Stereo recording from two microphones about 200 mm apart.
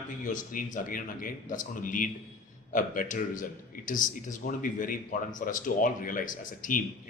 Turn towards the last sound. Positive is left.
turn(degrees=40)  # may be behind; listen again after turning